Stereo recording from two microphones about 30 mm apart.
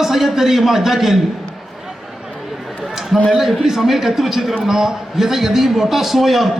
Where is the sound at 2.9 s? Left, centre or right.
Centre.